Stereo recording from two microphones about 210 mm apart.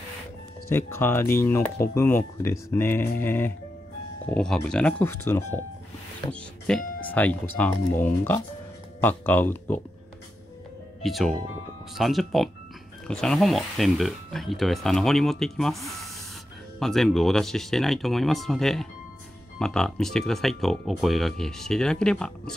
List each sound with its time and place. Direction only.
0.7 s speech: 10° left (ahead or behind)
6.7 s speech: 5° left (ahead or behind)
11.0 s speech: centre (ahead or behind)